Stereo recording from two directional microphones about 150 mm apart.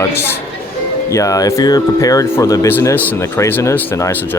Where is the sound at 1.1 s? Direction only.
20° left (ahead or behind).